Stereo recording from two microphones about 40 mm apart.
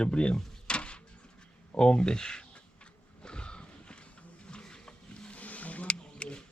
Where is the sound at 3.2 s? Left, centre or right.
Left.